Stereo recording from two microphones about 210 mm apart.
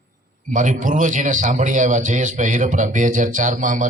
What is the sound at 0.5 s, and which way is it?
Speech, 40° right (ahead or behind).